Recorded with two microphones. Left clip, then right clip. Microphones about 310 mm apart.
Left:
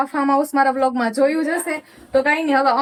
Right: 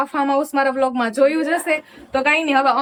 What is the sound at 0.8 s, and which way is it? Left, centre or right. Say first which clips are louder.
Speech: even; centre.